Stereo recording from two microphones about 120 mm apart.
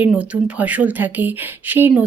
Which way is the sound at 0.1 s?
10° right (ahead or behind).